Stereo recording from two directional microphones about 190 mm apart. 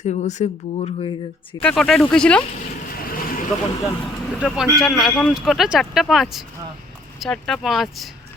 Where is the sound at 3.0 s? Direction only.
50° left (ahead or behind).